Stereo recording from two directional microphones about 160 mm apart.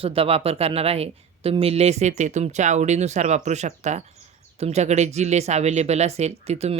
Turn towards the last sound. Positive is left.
turn(degrees=-40)  # may be behind; listen again after turning